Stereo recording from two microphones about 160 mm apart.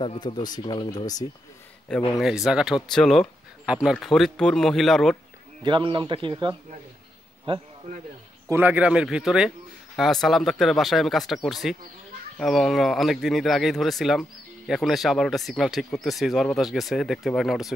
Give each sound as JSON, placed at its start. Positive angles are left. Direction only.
{"t": 0.0, "sound": "speech", "side_deg": 30}
{"t": 2.1, "sound": "speech", "side_deg": 0}
{"t": 5.6, "sound": "a man's voice", "side_deg": -30}
{"t": 8.5, "sound": "speech", "side_deg": -10}